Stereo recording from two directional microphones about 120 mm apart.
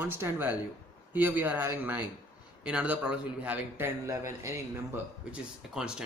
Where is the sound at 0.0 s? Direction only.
15° right (ahead or behind).